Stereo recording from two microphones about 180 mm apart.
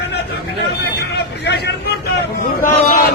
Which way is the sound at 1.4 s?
70° left (ahead or behind).